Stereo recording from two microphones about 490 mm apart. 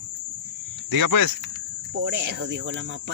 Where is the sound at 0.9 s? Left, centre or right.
Right.